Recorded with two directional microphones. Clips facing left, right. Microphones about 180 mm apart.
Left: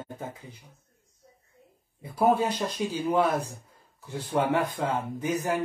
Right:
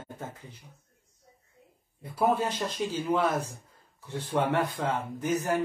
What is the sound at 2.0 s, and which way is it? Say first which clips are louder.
Speech: left 3 dB; 10° left (ahead or behind).